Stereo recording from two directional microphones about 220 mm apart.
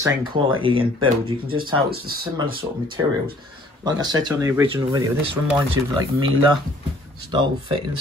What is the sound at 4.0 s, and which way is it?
Speech, 20° right (ahead or behind).